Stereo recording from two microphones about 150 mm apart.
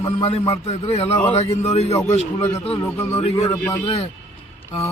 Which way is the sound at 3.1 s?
45° left (ahead or behind).